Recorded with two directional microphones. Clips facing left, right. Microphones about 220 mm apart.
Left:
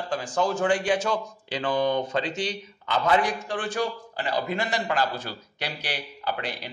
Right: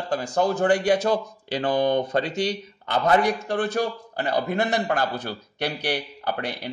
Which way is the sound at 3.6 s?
60° right (ahead or behind).